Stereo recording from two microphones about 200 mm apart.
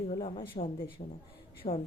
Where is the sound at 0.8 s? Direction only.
45° left (ahead or behind).